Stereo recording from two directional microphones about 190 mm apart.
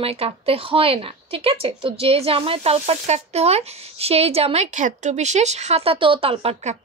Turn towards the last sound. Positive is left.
turn(degrees=-35)  # may be behind; listen again after turning